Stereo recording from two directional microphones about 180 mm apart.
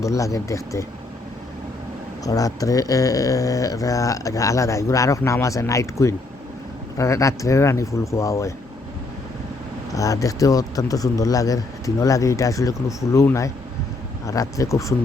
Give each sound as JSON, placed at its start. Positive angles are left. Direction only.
{"t": 0.0, "sound": "speech", "side_deg": 15}
{"t": 2.2, "sound": "speech", "side_deg": 20}
{"t": 9.9, "sound": "speech", "side_deg": 20}